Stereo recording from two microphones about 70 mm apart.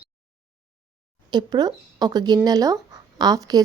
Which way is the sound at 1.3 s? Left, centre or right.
Right.